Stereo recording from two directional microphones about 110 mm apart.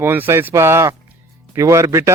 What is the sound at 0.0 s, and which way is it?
Speech, 20° right (ahead or behind).